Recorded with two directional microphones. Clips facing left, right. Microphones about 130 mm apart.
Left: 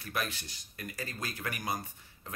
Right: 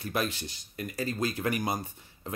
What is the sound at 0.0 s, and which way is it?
Speech, 25° right (ahead or behind).